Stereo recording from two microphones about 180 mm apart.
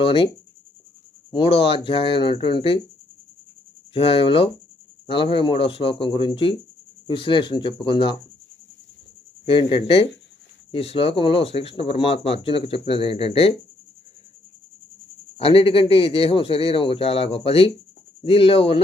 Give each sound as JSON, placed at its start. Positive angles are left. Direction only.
{"t": 0.0, "sound": "speech", "side_deg": 30}
{"t": 1.3, "sound": "speech", "side_deg": 30}
{"t": 3.9, "sound": "speech", "side_deg": 30}
{"t": 9.5, "sound": "speech", "side_deg": 30}
{"t": 15.4, "sound": "speech", "side_deg": 30}